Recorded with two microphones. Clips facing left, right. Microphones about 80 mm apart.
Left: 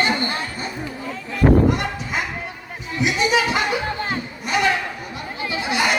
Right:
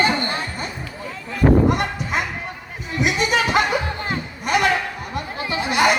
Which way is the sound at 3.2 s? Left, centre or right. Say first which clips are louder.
Left 1 dB; right.